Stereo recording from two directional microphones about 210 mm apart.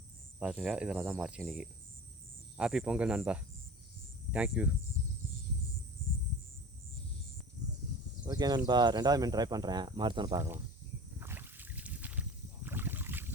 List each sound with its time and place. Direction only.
0.3 s speech: 5° right (ahead or behind)
4.3 s hum: 5° right (ahead or behind)
8.2 s speech: 20° right (ahead or behind)
11.2 s boat: 10° right (ahead or behind)